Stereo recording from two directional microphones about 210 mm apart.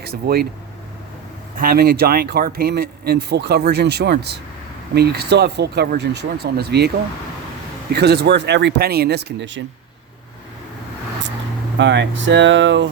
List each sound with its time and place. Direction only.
0.0 s speech: 50° right (ahead or behind)
1.5 s speech: 45° right (ahead or behind)
7.9 s speech: 50° right (ahead or behind)
11.8 s speech: 60° right (ahead or behind)